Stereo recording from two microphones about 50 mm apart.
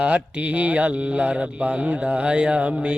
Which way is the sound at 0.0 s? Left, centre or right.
Right.